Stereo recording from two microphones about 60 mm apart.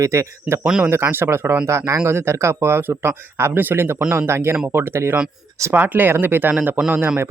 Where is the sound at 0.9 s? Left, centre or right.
Right.